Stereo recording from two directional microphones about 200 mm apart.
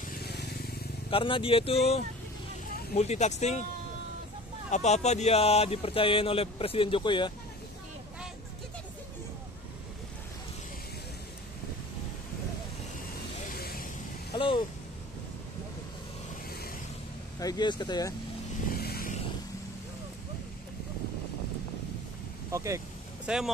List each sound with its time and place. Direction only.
0.2 s vehicle: 55° left (ahead or behind)
1.1 s speech: 25° left (ahead or behind)
4.6 s speech: 35° left (ahead or behind)
13.5 s vehicle: 45° left (ahead or behind)
14.3 s a sound: 25° left (ahead or behind)
17.4 s speech: 20° left (ahead or behind)
18.7 s vehicle: 50° left (ahead or behind)
22.5 s vehicle: 15° right (ahead or behind)
23.2 s speech: 5° right (ahead or behind)